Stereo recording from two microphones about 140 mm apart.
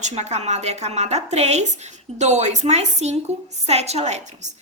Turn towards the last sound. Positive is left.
turn(degrees=-50)  # may be behind; listen again after turning